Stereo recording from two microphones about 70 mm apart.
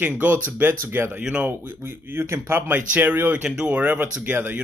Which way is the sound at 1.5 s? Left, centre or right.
Right.